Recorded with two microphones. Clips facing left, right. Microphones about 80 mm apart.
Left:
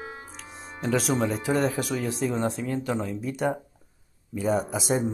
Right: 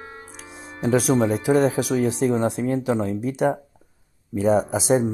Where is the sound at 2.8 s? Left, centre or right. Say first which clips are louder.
Right 6 dB; right.